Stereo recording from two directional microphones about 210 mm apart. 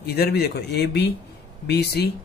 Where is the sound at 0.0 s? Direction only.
50° left (ahead or behind).